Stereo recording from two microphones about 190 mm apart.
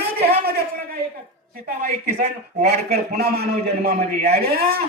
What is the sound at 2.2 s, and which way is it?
A man's voice, 55° right (ahead or behind).